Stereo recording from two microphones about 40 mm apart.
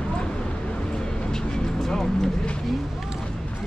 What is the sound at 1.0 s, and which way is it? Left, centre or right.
Vehicle, centre.